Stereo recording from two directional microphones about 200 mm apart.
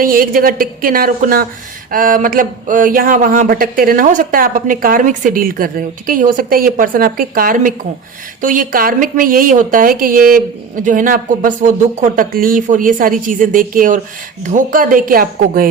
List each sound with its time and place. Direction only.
0.0 s speech: 45° right (ahead or behind)